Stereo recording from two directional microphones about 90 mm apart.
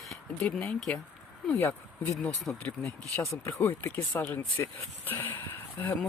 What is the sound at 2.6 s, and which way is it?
Speech, 15° left (ahead or behind).